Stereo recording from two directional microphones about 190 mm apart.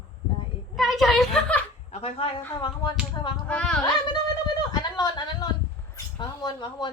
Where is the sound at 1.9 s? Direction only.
30° left (ahead or behind).